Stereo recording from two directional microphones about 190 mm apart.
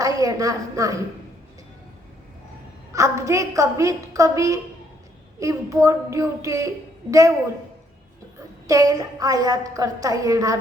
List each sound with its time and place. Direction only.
0.0 s a woman's voice: 20° right (ahead or behind)
2.9 s a woman's voice: 15° right (ahead or behind)
8.6 s a woman's voice: 20° right (ahead or behind)